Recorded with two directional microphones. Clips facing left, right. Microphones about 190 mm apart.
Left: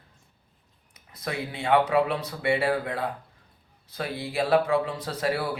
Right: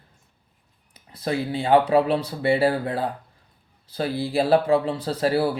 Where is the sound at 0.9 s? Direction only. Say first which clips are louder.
Right 7 dB; 30° right (ahead or behind).